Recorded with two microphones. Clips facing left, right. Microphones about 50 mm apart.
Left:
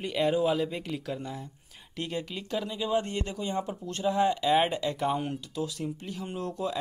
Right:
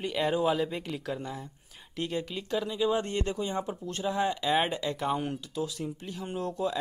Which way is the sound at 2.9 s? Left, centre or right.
Centre.